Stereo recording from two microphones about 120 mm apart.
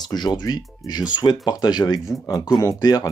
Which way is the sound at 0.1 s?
35° left (ahead or behind).